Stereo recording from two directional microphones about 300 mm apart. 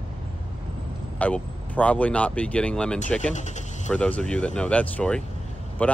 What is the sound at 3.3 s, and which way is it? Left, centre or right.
Speech, left.